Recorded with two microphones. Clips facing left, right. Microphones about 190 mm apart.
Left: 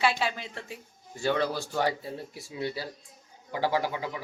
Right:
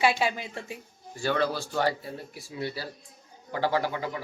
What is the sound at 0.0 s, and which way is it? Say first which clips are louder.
Speech: right 2 dB; 15° right (ahead or behind).